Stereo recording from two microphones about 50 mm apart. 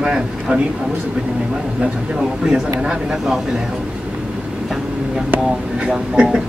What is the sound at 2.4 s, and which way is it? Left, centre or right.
Speech, centre.